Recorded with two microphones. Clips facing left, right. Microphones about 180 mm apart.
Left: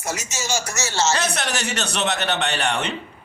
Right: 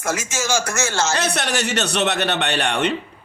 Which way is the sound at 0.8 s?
55° right (ahead or behind).